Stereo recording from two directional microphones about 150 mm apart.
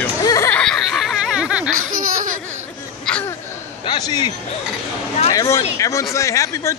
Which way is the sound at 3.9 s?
30° left (ahead or behind).